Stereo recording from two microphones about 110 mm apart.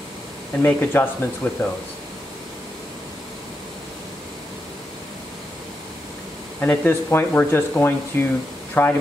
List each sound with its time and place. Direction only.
0.6 s speech: 20° left (ahead or behind)
6.6 s speech: 15° left (ahead or behind)